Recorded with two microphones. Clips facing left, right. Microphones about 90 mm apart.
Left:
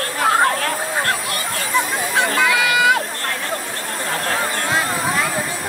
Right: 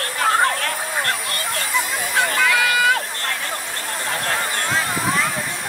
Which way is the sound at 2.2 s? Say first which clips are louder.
Left 1 dB; 20° left (ahead or behind).